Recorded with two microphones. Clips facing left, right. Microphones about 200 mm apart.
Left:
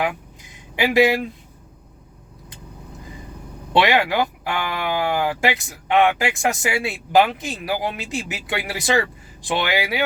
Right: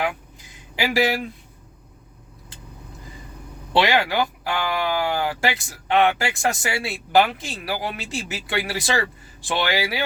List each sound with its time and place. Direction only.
0.8 s speech: 20° left (ahead or behind)
3.8 s speech: 20° left (ahead or behind)